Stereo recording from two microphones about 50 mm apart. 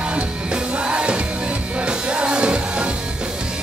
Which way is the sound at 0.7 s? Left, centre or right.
Centre.